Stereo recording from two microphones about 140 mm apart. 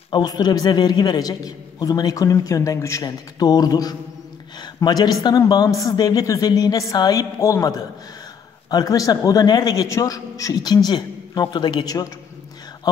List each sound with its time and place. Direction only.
0.1 s a man's voice: 30° left (ahead or behind)